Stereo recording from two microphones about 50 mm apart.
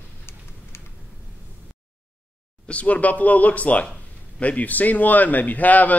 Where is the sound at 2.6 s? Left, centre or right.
Left.